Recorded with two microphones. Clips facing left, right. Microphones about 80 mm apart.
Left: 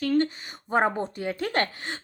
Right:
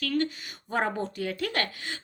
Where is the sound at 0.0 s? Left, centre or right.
Left.